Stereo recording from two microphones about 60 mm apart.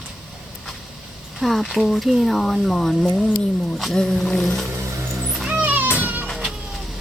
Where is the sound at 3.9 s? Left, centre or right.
Centre.